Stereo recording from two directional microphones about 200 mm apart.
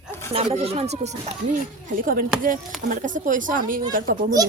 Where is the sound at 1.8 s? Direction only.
45° right (ahead or behind).